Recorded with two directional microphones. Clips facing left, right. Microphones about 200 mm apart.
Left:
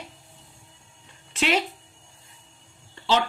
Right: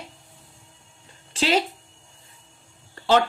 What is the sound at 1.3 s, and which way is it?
Speech, 30° right (ahead or behind).